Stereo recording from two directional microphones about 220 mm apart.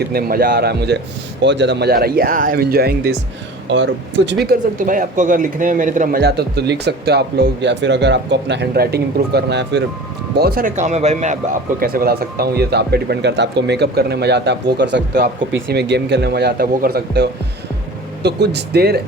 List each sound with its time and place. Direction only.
0.1 s speech: 45° right (ahead or behind)
11.8 s speech: 40° right (ahead or behind)